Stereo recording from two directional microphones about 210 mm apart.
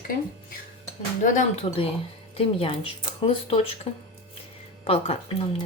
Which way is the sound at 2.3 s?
25° left (ahead or behind).